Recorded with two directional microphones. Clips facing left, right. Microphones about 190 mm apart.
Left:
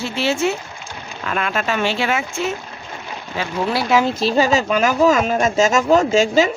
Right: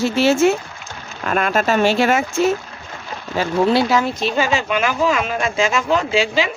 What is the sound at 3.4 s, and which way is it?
Speech, 40° right (ahead or behind).